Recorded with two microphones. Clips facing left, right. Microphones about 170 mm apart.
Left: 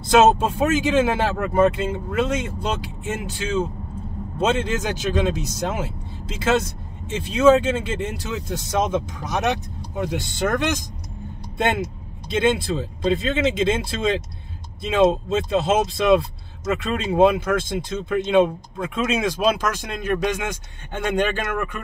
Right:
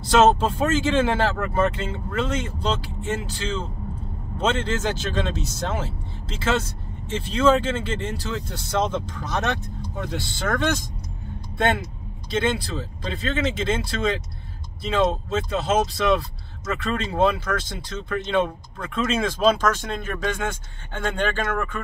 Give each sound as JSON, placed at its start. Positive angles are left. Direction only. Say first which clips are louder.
{"t": 0.0, "sound": "speech", "louder": "left 2 dB", "side_deg": 15}